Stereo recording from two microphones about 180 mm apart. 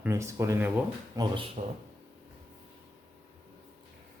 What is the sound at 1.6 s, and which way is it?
Speech, 40° right (ahead or behind).